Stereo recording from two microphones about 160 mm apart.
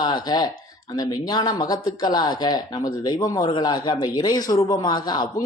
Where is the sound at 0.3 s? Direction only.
25° left (ahead or behind).